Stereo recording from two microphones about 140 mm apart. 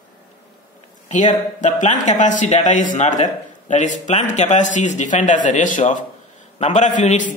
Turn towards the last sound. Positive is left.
turn(degrees=60)  # may be behind; listen again after turning